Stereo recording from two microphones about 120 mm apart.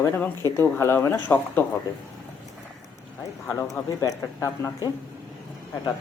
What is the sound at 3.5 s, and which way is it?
Speech, 30° left (ahead or behind).